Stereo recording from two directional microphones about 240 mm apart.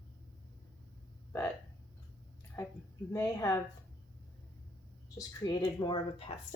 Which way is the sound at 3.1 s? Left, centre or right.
Centre.